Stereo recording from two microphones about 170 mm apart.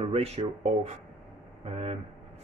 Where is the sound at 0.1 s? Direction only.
40° right (ahead or behind).